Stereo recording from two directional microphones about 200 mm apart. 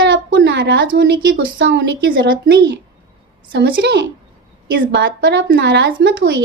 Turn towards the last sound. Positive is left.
turn(degrees=-60)  # may be behind; listen again after turning